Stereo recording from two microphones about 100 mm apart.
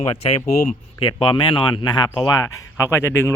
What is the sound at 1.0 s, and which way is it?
Speech, 50° left (ahead or behind).